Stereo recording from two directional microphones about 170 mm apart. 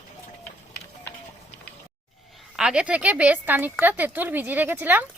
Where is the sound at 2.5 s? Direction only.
5° right (ahead or behind).